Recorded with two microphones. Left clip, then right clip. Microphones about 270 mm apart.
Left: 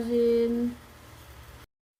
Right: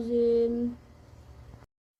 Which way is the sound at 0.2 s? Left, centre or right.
Centre.